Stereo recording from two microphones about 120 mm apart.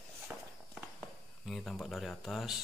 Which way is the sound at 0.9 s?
Centre (ahead or behind).